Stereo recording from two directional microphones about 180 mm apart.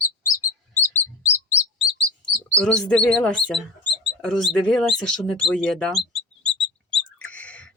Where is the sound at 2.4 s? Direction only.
5° left (ahead or behind).